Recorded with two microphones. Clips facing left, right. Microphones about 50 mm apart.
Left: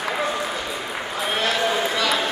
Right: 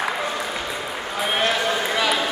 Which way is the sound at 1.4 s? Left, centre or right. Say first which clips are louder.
Left 1 dB; centre.